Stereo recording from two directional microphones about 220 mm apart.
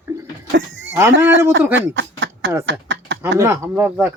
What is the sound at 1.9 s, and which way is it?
Speech, 60° right (ahead or behind).